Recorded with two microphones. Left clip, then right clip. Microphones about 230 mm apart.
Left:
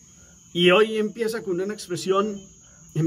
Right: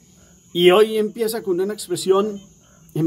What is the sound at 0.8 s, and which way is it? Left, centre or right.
Speech, centre.